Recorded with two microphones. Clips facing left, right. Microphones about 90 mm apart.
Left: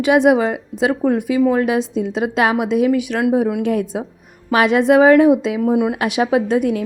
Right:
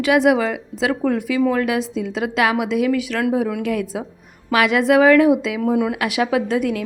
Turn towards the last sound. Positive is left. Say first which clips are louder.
# left 3 dB
turn(degrees=25)  # may be behind; listen again after turning